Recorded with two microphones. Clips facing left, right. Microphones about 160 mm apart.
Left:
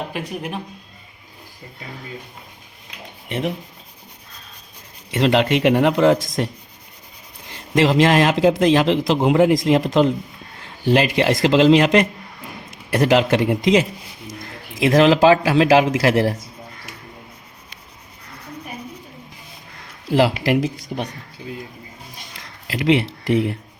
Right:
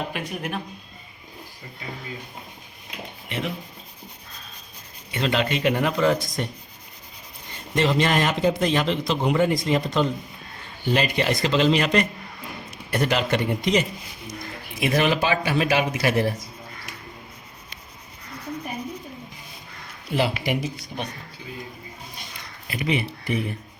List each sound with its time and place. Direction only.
0.1 s speech: 30° left (ahead or behind)
5.1 s speech: 75° left (ahead or behind)
7.5 s a man's voice: 90° left
20.1 s a man's voice: 90° left
22.6 s a man's voice: 90° left